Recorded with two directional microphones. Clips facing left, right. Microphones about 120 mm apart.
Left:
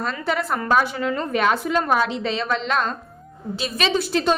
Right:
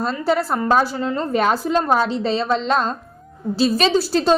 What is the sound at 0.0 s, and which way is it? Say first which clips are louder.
A woman's voice: right 5 dB; 35° right (ahead or behind).